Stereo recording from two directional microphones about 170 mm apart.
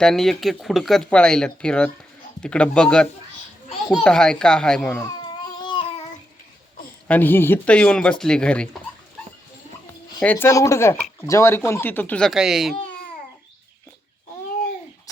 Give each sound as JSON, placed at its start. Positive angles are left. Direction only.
{"t": 0.0, "sound": "speech", "side_deg": 0}
{"t": 4.9, "sound": "baby cry", "side_deg": 20}
{"t": 7.1, "sound": "speech", "side_deg": 10}
{"t": 10.2, "sound": "speech", "side_deg": 10}